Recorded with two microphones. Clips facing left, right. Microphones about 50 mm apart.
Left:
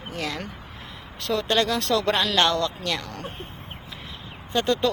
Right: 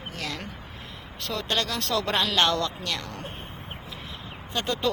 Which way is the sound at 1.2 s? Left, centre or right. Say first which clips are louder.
Left 6 dB; centre.